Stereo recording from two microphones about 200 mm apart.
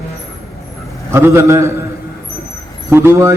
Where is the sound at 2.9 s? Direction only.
10° right (ahead or behind).